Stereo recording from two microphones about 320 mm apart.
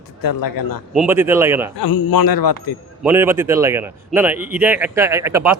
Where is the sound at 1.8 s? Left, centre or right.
Left.